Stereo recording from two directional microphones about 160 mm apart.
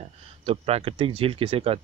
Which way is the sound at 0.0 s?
40° right (ahead or behind).